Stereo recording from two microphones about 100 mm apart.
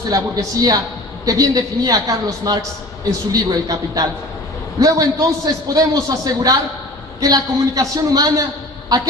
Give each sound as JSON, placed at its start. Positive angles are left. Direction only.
{"t": 0.1, "sound": "a man's voice", "side_deg": -40}